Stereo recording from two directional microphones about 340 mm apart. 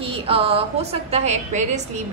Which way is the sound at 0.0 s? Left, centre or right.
Centre.